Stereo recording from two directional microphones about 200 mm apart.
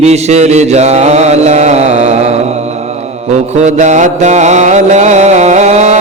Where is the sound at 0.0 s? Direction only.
35° right (ahead or behind).